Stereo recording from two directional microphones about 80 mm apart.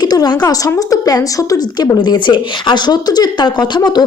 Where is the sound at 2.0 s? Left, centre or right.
Left.